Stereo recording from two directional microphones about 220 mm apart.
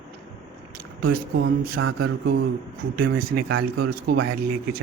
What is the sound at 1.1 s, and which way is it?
Speech, 40° right (ahead or behind).